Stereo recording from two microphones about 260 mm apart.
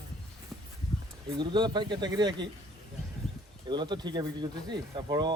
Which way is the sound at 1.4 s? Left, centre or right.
Centre.